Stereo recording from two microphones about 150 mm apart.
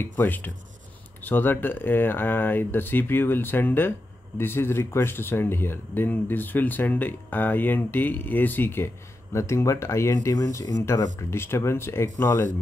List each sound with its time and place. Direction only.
0.0 s speech: 15° left (ahead or behind)